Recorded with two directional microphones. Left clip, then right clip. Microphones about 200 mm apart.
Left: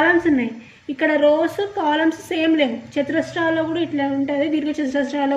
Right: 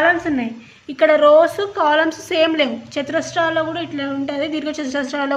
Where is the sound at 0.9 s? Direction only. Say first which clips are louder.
Right 5 dB; 40° right (ahead or behind).